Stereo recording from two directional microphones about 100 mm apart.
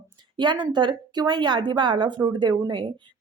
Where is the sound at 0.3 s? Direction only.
50° right (ahead or behind).